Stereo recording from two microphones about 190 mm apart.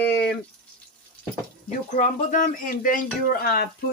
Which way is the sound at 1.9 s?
40° left (ahead or behind).